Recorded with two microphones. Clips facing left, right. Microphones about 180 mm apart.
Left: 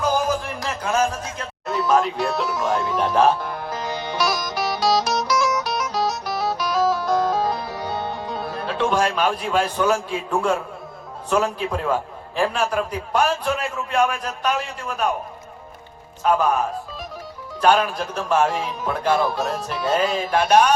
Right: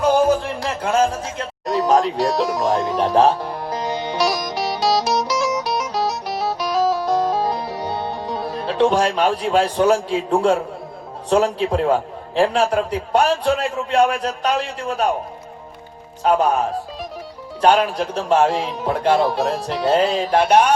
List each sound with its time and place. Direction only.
0.0 s music: 30° right (ahead or behind)
11.3 s a man's voice: 30° right (ahead or behind)
16.2 s a man's voice: 30° right (ahead or behind)